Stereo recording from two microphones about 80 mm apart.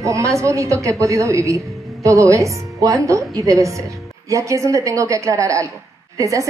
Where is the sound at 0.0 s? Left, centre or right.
Right.